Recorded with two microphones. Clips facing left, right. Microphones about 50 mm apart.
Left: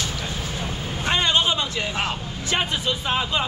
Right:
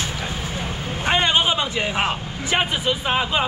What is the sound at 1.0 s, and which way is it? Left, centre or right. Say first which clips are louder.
A man's voice: right 2 dB; centre.